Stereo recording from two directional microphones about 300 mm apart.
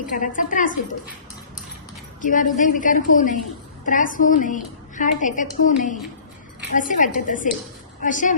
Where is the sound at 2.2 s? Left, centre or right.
Left.